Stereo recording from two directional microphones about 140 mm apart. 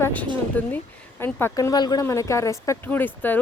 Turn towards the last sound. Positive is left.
turn(degrees=15)  # may be behind; listen again after turning